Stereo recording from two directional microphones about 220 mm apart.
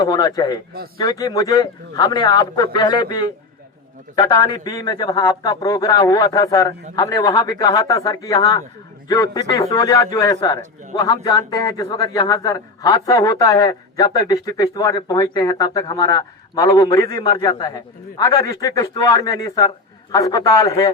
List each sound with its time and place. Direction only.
0.0 s a man's voice: 20° left (ahead or behind)